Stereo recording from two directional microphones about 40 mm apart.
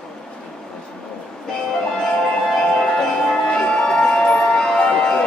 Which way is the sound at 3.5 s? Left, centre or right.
Left.